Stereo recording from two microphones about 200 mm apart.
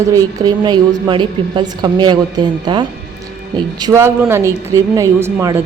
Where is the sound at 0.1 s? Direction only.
20° right (ahead or behind).